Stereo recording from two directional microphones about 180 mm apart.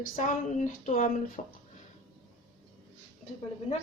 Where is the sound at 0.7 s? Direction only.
50° left (ahead or behind).